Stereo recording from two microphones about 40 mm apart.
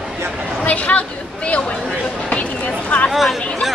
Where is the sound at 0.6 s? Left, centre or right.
Left.